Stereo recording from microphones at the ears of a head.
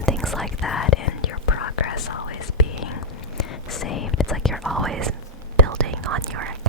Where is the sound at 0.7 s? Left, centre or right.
Left.